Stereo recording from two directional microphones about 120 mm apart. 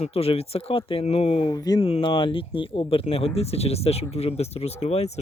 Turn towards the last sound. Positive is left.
turn(degrees=60)  # may be behind; listen again after turning